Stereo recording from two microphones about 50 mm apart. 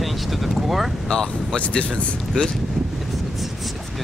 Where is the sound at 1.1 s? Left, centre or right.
Centre.